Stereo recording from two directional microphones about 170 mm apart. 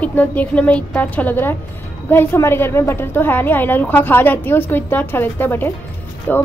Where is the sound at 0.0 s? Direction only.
10° left (ahead or behind).